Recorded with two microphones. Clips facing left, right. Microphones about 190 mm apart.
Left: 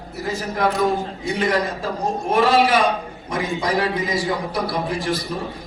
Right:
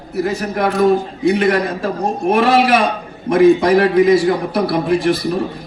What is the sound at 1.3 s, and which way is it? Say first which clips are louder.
A man's voice: right 7 dB; 65° right (ahead or behind).